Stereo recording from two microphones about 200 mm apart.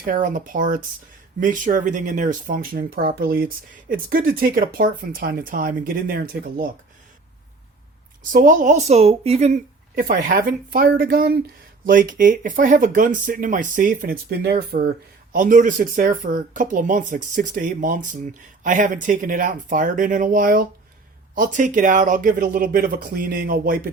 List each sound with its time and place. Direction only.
0.0 s speech: 40° right (ahead or behind)
8.2 s speech: 40° right (ahead or behind)
9.9 s speech: 45° right (ahead or behind)